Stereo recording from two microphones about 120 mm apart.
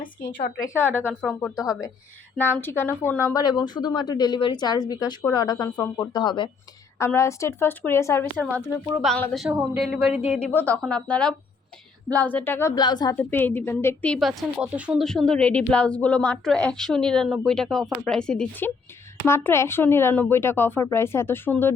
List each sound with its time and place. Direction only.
0.6 s a woman's voice: 20° left (ahead or behind)
1.5 s speech: 30° left (ahead or behind)
2.4 s speech: 20° left (ahead or behind)
3.4 s a woman's voice: 35° left (ahead or behind)
7.0 s speech: 20° left (ahead or behind)
9.0 s a woman's voice: centre (ahead or behind)
10.5 s a woman's voice: 15° left (ahead or behind)
12.7 s a woman's voice: 35° left (ahead or behind)
13.1 s a woman's voice: 15° left (ahead or behind)
14.1 s a woman's voice: centre (ahead or behind)
14.7 s speech: 10° right (ahead or behind)
14.9 s a woman's voice: 5° left (ahead or behind)
19.2 s speech: 20° left (ahead or behind)